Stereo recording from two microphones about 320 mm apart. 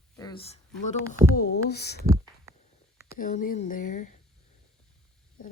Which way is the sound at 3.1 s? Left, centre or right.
Left.